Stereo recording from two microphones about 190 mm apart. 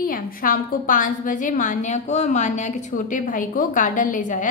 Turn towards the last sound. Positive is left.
turn(degrees=40)  # may be behind; listen again after turning